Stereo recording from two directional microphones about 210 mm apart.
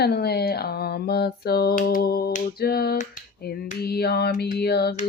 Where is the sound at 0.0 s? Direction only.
50° left (ahead or behind).